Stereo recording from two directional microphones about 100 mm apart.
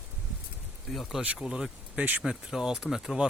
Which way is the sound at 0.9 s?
Centre (ahead or behind).